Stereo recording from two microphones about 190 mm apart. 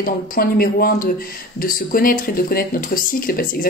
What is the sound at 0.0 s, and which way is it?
Speech, 50° left (ahead or behind).